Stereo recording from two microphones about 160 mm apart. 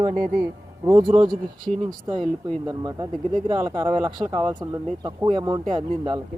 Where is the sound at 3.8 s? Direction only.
30° right (ahead or behind).